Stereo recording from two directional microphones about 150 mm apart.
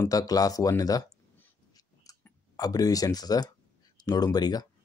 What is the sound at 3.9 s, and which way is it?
Speech, 25° left (ahead or behind).